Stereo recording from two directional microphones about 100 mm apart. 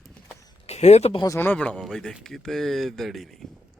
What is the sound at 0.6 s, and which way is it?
Speech, 90° left.